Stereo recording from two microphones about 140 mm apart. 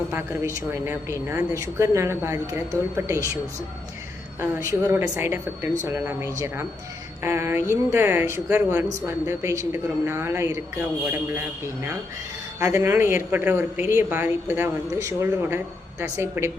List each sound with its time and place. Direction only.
0.1 s a woman's voice: 15° right (ahead or behind)
4.4 s a woman's voice: 20° right (ahead or behind)